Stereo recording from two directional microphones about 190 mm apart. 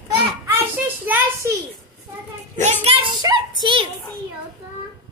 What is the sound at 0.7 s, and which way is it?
Speech, 10° right (ahead or behind).